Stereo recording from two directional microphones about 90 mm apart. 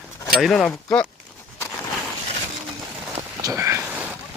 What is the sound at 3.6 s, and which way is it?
Boat, 30° right (ahead or behind).